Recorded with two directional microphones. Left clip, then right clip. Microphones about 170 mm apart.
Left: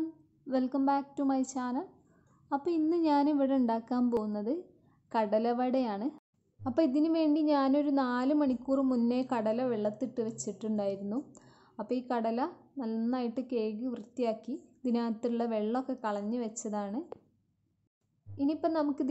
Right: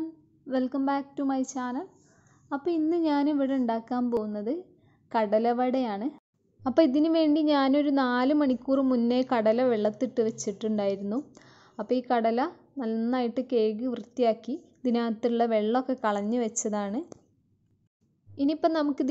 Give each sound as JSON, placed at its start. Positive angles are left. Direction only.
{"t": 0.5, "sound": "a woman's voice", "side_deg": 0}
{"t": 16.0, "sound": "a woman's voice", "side_deg": -30}
{"t": 18.3, "sound": "a woman's voice", "side_deg": -20}